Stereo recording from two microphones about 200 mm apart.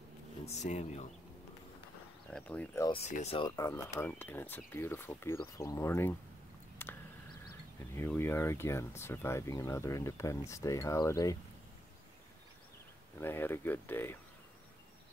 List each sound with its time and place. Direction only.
0.5 s speech: 35° left (ahead or behind)
2.3 s speech: 5° left (ahead or behind)
3.0 s speech: 35° left (ahead or behind)
3.3 s speech: 15° left (ahead or behind)
6.8 s a sound: 10° left (ahead or behind)
7.9 s speech: 10° left (ahead or behind)
13.2 s speech: 10° left (ahead or behind)